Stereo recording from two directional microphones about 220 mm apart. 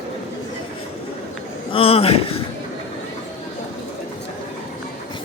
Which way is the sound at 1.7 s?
25° left (ahead or behind).